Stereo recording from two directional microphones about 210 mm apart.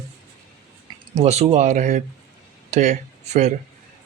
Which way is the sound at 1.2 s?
30° right (ahead or behind).